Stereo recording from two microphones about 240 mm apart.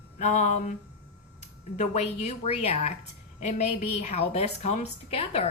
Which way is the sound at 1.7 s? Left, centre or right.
Left.